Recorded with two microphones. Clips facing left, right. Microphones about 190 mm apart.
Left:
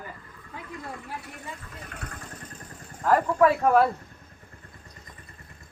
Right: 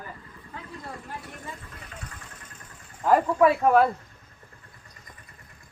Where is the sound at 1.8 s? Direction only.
55° left (ahead or behind).